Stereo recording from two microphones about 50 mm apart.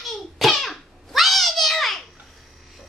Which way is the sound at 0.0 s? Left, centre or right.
Centre.